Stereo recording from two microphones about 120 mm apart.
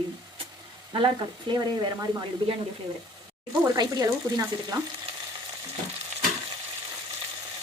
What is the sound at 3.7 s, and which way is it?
Speech, 30° right (ahead or behind).